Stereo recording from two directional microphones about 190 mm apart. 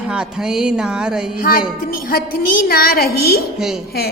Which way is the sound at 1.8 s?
50° left (ahead or behind).